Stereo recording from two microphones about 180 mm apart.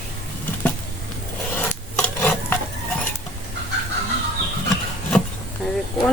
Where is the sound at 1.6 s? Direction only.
10° left (ahead or behind).